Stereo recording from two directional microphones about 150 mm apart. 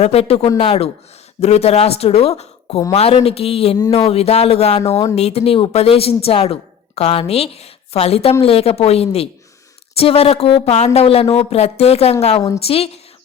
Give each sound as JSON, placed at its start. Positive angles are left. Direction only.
{"t": 0.0, "sound": "speech", "side_deg": 45}